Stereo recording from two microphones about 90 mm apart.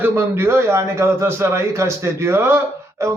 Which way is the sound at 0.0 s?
25° right (ahead or behind).